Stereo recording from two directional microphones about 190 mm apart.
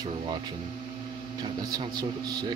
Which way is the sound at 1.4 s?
20° right (ahead or behind).